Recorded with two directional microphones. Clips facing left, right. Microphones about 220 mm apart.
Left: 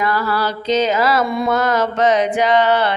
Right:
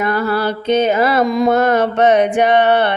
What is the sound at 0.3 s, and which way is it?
Mantra, 60° right (ahead or behind).